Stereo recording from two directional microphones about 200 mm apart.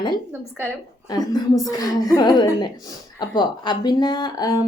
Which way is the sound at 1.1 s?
20° left (ahead or behind).